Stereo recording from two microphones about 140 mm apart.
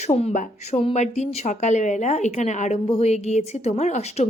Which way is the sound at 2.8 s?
45° left (ahead or behind).